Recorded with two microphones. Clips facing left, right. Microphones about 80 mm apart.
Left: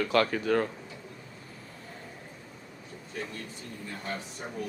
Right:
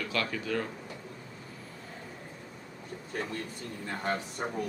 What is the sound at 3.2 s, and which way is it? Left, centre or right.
Speech, right.